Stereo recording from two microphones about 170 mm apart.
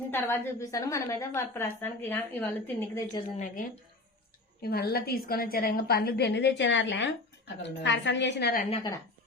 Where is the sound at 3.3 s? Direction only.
50° left (ahead or behind).